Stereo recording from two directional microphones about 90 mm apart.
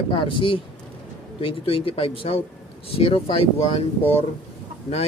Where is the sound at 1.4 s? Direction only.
90° left.